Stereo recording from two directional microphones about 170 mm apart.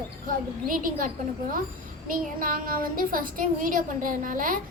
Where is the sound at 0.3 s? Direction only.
55° right (ahead or behind).